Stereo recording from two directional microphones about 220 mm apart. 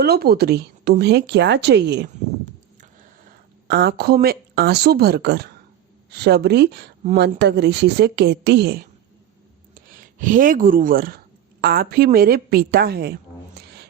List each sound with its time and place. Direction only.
0.0 s speech: 45° right (ahead or behind)
3.7 s speech: 50° right (ahead or behind)